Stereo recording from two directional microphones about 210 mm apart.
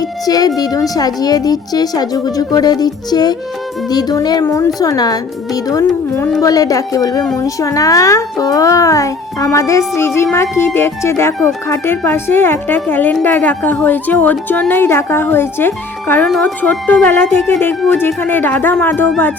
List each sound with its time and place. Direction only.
0.3 s speech: 20° left (ahead or behind)